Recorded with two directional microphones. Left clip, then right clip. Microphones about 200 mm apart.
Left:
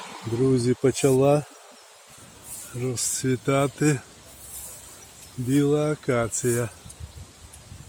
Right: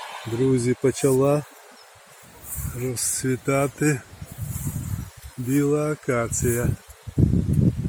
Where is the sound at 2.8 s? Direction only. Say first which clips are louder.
Even; centre (ahead or behind).